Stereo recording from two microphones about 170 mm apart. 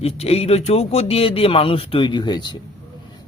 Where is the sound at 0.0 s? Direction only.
35° left (ahead or behind).